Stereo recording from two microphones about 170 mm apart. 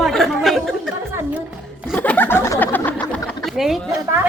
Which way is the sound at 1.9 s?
10° left (ahead or behind).